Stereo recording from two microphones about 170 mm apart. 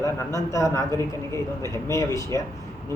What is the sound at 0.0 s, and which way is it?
Speech, 15° left (ahead or behind).